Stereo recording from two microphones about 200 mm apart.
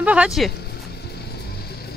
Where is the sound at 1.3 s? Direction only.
55° left (ahead or behind).